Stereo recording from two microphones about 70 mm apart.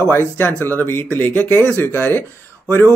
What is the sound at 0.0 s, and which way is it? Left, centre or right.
A man's voice, left.